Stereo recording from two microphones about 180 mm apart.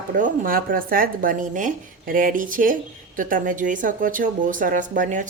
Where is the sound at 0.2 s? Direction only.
50° right (ahead or behind).